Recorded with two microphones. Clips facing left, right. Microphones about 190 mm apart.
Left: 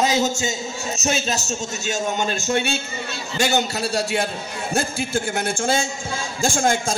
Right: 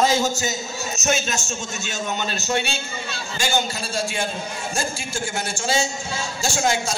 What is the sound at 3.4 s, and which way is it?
A man's voice, 65° left (ahead or behind).